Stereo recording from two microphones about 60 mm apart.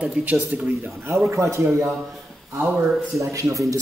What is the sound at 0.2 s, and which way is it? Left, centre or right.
Speech, right.